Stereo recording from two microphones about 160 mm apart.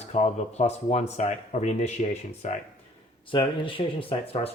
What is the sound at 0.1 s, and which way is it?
Speech, 45° left (ahead or behind).